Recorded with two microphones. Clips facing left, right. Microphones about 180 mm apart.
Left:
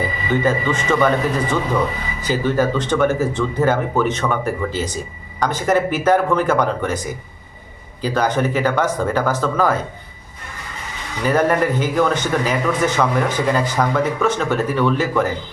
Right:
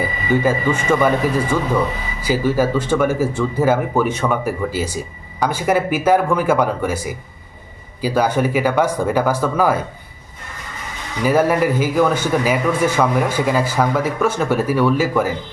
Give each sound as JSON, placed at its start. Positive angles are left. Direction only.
{"t": 0.3, "sound": "a man's voice", "side_deg": -10}
{"t": 11.2, "sound": "a man's voice", "side_deg": -10}